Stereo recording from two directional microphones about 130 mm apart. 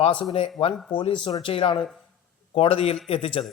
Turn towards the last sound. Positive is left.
turn(degrees=45)  # may be behind; listen again after turning